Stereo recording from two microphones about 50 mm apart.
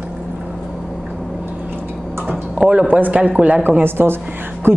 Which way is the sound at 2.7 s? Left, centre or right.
Right.